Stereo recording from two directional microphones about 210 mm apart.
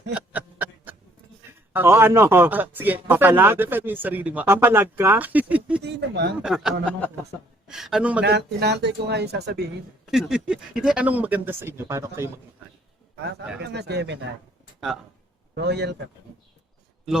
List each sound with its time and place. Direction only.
0.1 s chuckle: 10° right (ahead or behind)
1.7 s speech: 10° right (ahead or behind)
5.8 s speech: 55° right (ahead or behind)
6.4 s a man's voice: centre (ahead or behind)
8.2 s speech: 55° right (ahead or behind)
10.1 s speech: centre (ahead or behind)
13.6 s speech: 50° right (ahead or behind)
15.5 s speech: 55° right (ahead or behind)